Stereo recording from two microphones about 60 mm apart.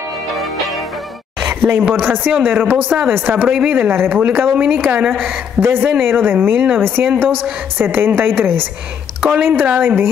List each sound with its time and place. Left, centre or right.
0.4 s music: centre
1.7 s speech: right